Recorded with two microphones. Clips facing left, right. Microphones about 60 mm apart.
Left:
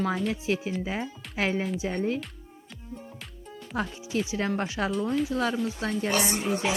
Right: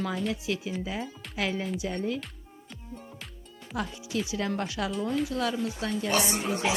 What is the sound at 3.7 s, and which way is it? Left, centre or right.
Speech, left.